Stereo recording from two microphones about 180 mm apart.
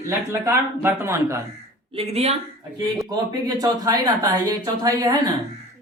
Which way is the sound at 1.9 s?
35° right (ahead or behind).